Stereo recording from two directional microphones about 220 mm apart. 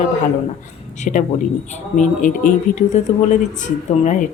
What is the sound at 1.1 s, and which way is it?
Speech, 35° left (ahead or behind).